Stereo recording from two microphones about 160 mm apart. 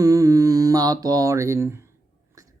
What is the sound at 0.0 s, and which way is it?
Mantra, 20° right (ahead or behind).